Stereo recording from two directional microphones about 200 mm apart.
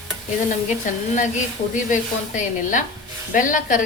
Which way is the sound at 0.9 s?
40° left (ahead or behind).